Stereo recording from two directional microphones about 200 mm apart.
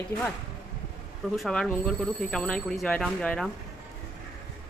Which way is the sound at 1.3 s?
Centre (ahead or behind).